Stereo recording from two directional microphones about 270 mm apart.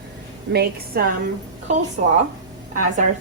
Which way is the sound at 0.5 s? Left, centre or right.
Right.